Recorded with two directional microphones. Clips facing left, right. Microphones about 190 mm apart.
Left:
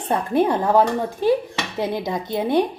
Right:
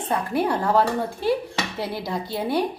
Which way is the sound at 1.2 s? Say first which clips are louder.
Left 5 dB; 15° left (ahead or behind).